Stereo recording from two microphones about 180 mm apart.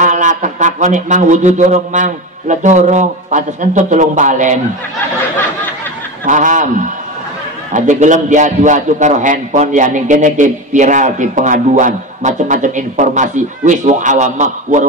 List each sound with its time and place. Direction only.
0.0 s a man's voice: 45° right (ahead or behind)
6.2 s a man's voice: 45° right (ahead or behind)